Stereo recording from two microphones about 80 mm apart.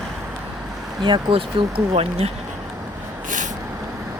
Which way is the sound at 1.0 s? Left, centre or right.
Right.